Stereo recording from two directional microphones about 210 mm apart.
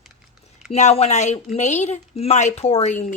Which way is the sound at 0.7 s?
30° left (ahead or behind).